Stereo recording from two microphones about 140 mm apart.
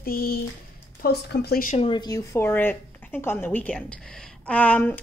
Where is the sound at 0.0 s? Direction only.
90° left.